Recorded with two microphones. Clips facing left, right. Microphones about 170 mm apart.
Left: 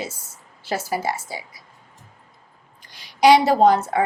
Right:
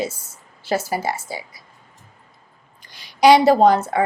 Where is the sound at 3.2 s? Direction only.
35° right (ahead or behind).